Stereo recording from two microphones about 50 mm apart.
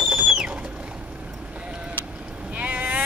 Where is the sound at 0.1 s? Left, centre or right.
Centre.